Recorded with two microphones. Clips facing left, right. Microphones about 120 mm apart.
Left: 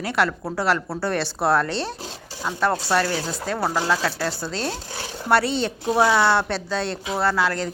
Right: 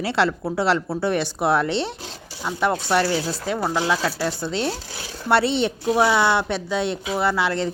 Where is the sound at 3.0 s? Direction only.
30° right (ahead or behind).